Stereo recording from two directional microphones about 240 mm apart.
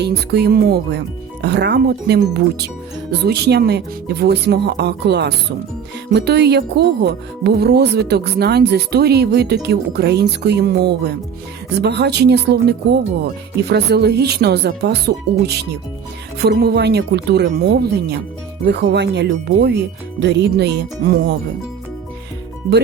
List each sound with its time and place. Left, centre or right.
0.0 s speech: right